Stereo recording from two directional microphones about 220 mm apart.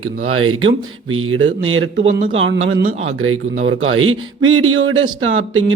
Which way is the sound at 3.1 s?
70° right (ahead or behind).